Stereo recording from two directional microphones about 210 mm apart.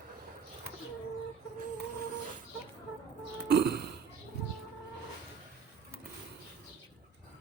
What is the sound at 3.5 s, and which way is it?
Burping, 50° right (ahead or behind).